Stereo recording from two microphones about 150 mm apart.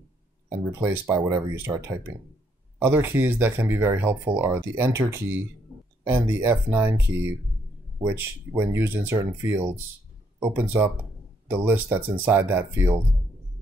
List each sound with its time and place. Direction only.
0.5 s speech: 20° right (ahead or behind)